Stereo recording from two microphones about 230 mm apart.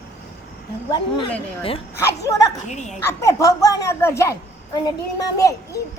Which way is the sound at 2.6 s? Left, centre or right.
Left.